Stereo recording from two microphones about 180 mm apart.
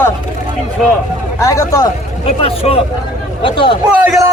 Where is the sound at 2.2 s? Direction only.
35° left (ahead or behind).